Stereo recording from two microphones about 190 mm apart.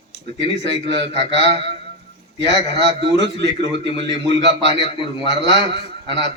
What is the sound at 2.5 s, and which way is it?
A man's voice, 65° right (ahead or behind).